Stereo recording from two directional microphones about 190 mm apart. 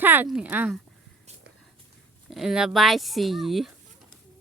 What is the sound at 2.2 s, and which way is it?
Speech, centre (ahead or behind).